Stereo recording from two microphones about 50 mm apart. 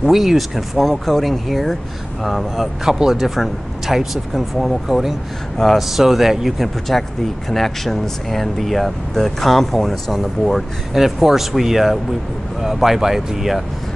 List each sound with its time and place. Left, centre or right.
0.0 s speech: centre
6.9 s speech: centre